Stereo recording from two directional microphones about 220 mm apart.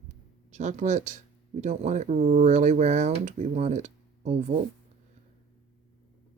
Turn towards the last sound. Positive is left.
turn(degrees=-30)  # may be behind; listen again after turning